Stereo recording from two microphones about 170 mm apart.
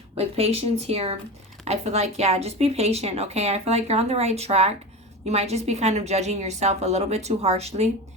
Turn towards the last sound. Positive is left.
turn(degrees=-35)  # may be behind; listen again after turning